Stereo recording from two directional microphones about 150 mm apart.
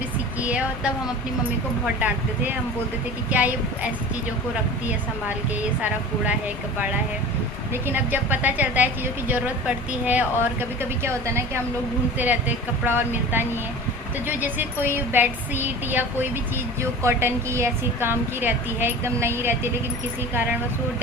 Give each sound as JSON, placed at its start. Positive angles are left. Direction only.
{"t": 0.4, "sound": "speech", "side_deg": -10}
{"t": 2.0, "sound": "a woman's voice", "side_deg": -10}
{"t": 7.7, "sound": "a woman's voice", "side_deg": -15}